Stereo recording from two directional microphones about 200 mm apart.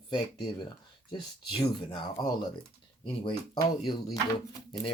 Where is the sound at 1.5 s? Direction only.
25° left (ahead or behind).